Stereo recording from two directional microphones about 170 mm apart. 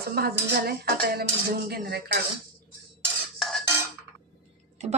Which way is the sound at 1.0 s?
65° right (ahead or behind).